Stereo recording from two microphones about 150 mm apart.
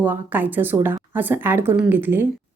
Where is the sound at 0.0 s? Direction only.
10° right (ahead or behind).